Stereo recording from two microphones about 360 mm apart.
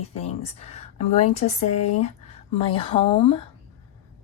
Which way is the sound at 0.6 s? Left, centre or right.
Centre.